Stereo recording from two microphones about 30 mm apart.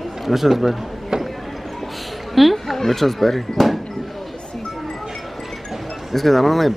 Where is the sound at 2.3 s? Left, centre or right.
Centre.